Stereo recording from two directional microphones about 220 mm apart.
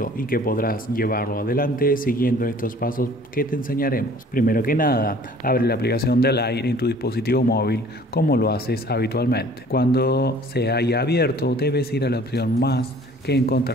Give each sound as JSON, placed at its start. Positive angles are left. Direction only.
{"t": 0.0, "sound": "speech", "side_deg": 40}